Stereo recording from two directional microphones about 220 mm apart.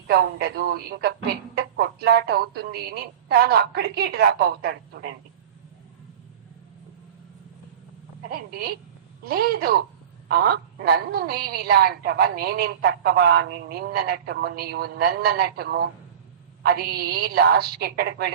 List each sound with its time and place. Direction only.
0.1 s a woman's voice: 45° right (ahead or behind)
8.3 s a woman's voice: 45° right (ahead or behind)